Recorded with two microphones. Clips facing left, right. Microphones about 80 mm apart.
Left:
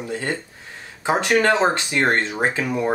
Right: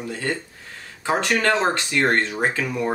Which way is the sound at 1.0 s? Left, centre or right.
Centre.